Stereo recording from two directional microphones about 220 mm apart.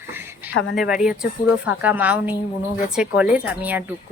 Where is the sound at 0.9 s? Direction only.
5° right (ahead or behind).